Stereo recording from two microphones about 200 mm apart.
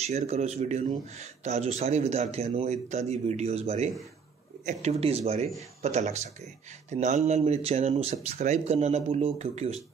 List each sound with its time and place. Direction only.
0.0 s speech: 30° right (ahead or behind)
5.0 s speech: 30° right (ahead or behind)